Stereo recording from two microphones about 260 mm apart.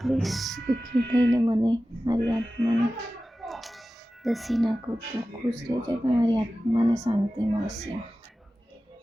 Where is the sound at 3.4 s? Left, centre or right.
Centre.